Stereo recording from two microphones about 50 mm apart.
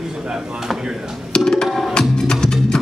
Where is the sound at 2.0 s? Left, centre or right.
Centre.